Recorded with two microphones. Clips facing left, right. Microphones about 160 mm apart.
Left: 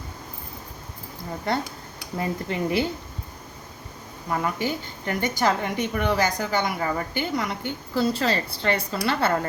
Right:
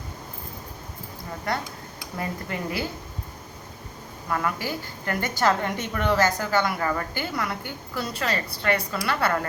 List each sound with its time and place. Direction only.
1.5 s a woman's voice: 25° left (ahead or behind)
4.3 s a woman's voice: 20° left (ahead or behind)